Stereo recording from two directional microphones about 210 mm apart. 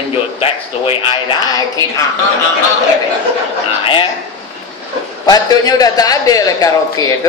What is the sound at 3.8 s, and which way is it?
Speech, 25° left (ahead or behind).